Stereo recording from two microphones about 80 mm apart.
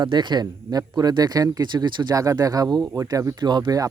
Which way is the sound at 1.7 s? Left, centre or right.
Right.